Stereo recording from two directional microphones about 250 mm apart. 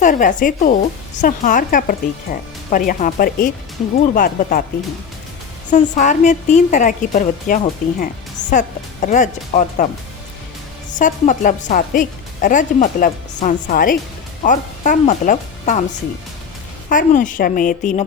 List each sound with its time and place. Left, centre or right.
0.0 s speech: left
5.7 s a woman's voice: left
10.9 s speech: left
16.9 s speech: left